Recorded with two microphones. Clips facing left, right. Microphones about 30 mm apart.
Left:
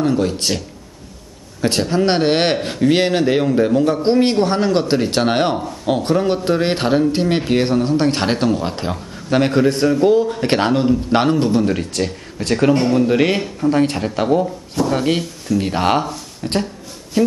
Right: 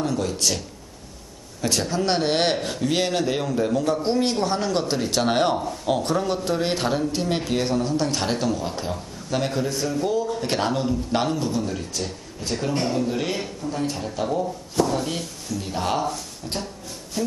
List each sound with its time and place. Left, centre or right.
0.0 s a man's voice: left
1.6 s a man's voice: left
5.6 s speech: centre
6.0 s a man's voice: left
12.9 s a man's voice: left